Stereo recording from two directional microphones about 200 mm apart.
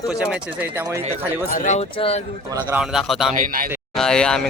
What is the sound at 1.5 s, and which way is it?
Speech, 35° left (ahead or behind).